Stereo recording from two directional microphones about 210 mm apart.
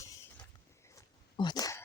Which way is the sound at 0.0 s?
15° left (ahead or behind).